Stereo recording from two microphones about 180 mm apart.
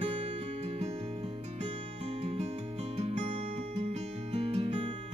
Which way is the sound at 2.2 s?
35° right (ahead or behind).